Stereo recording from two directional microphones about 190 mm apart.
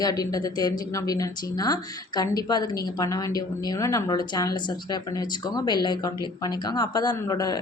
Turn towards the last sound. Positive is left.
turn(degrees=20)  # may be behind; listen again after turning